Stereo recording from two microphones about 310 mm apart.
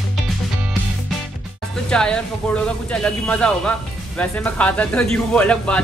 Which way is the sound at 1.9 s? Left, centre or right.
Centre.